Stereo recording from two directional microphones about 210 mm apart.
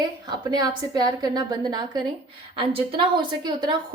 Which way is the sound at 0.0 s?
20° right (ahead or behind).